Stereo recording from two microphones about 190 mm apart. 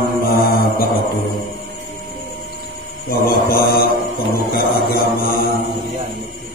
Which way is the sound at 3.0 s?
50° left (ahead or behind).